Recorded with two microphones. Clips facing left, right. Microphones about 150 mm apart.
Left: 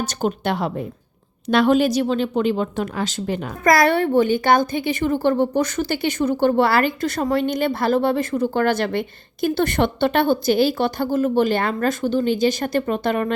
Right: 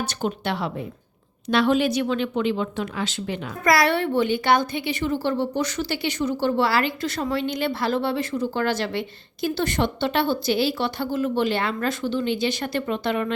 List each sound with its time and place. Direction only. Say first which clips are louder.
0.0 s a woman's voice: left 4 dB; 45° left (ahead or behind)